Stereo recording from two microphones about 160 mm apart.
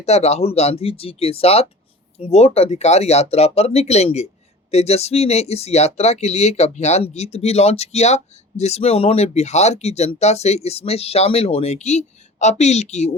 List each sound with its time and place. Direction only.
0.0 s speech: 40° left (ahead or behind)